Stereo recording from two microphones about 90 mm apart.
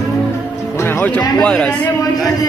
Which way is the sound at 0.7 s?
30° left (ahead or behind).